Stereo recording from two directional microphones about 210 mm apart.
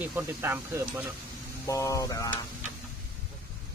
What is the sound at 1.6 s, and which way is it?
Speech, 15° left (ahead or behind).